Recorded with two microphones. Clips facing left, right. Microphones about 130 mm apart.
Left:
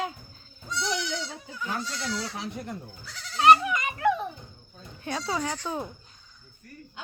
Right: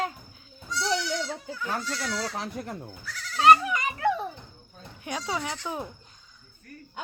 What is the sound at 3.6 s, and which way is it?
Children playing, 30° right (ahead or behind).